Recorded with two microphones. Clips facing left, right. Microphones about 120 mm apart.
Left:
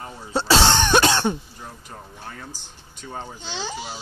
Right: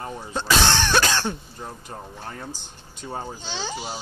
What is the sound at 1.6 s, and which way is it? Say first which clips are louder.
Speech: right 3 dB; 35° right (ahead or behind).